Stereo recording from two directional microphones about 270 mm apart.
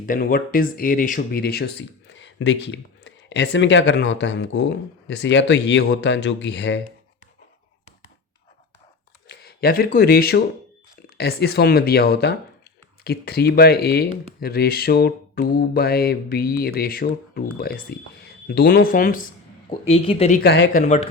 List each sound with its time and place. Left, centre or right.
0.0 s speech: left
9.3 s speech: left
20.8 s speech: left